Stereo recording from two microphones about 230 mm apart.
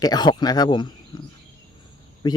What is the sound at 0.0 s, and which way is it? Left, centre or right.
Speech, centre.